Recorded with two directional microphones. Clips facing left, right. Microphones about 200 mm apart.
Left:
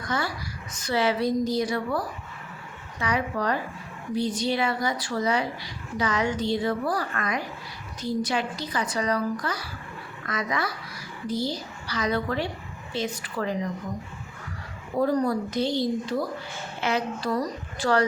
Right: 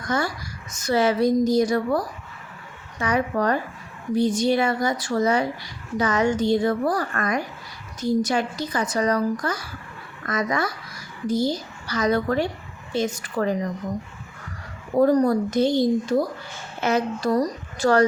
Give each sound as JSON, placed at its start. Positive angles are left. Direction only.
{"t": 0.0, "sound": "speech", "side_deg": -45}
{"t": 14.9, "sound": "speech", "side_deg": -45}